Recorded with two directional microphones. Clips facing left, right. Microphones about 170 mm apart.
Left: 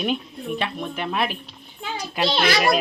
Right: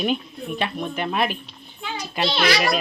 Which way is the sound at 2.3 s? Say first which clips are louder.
Left 1 dB; 45° left (ahead or behind).